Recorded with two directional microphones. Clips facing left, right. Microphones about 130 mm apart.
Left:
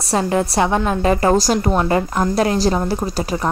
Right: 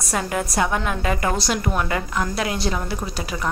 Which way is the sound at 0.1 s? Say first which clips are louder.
Left 6 dB; 30° left (ahead or behind).